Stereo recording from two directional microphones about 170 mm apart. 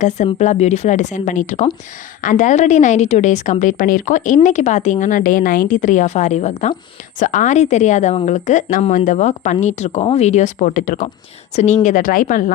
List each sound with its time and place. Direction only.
0.0 s a woman's voice: 45° left (ahead or behind)